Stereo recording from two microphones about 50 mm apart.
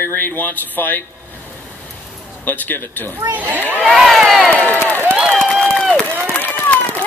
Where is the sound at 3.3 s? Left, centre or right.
Right.